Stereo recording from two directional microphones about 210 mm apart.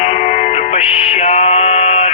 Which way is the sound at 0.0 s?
35° left (ahead or behind).